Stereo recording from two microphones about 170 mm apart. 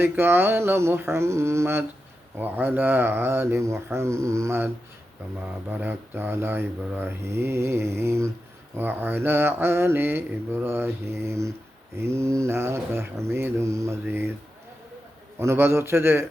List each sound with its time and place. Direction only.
0.0 s mantra: 15° right (ahead or behind)
15.4 s mantra: 15° right (ahead or behind)